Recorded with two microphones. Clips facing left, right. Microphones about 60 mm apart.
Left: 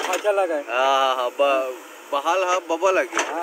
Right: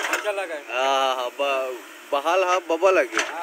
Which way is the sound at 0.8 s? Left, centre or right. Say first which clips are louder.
Left 2 dB; centre.